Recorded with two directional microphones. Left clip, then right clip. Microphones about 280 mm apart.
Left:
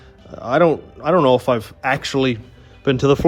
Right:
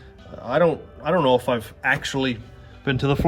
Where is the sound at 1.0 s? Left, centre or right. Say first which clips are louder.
Left 4 dB; left.